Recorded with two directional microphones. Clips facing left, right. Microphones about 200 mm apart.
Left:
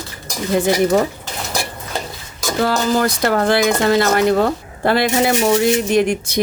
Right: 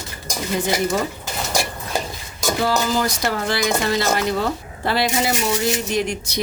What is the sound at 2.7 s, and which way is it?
Speech, 55° left (ahead or behind).